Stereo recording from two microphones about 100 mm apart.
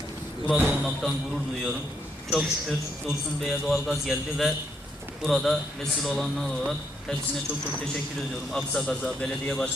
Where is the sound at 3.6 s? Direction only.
Centre (ahead or behind).